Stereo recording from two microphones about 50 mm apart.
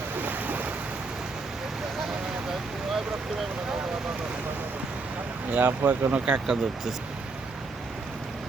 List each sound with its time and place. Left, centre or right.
0.2 s a sound: right
5.5 s speech: right
6.2 s speech: centre